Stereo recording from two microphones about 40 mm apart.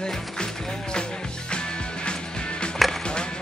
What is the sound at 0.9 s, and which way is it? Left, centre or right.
Music, left.